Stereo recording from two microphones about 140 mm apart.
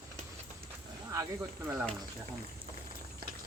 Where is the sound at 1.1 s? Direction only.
20° right (ahead or behind).